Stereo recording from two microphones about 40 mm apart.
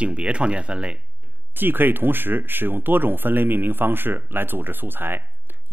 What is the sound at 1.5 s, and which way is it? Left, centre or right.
Speech, right.